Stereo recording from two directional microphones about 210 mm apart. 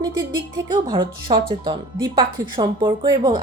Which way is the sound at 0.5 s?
20° right (ahead or behind).